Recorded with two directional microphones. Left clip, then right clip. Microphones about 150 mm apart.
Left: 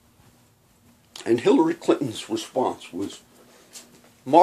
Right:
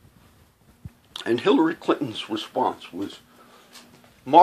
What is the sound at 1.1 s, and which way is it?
Speech, 15° left (ahead or behind).